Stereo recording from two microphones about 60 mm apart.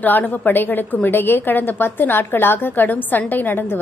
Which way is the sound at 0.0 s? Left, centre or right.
Left.